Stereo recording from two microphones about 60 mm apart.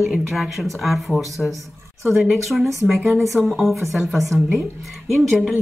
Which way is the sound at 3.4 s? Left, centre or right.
Centre.